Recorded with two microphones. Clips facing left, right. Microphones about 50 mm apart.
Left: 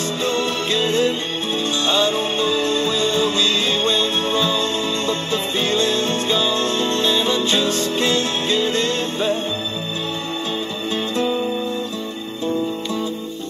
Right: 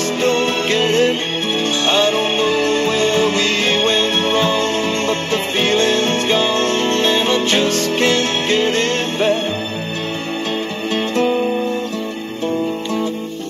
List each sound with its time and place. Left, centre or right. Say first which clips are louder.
0.2 s music: right 5 dB; right
11.1 s music: right 5 dB; right